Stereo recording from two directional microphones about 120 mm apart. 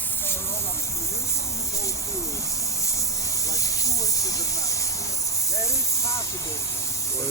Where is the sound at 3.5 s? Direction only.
25° left (ahead or behind).